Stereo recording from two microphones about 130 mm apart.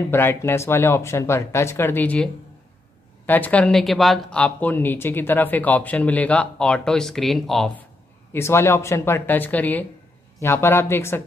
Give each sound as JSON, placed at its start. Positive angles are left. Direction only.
{"t": 0.1, "sound": "speech", "side_deg": 15}
{"t": 8.3, "sound": "speech", "side_deg": 20}